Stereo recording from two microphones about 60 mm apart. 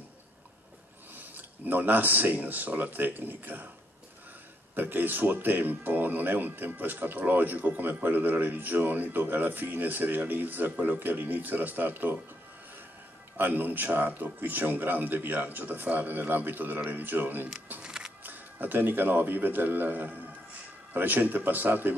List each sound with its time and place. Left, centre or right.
1.1 s speech: right
4.7 s speech: right
13.4 s speech: right
17.8 s music: centre
18.2 s a man's voice: right